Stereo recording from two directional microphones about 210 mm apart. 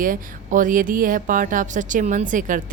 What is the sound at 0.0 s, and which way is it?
A woman's voice, 40° right (ahead or behind).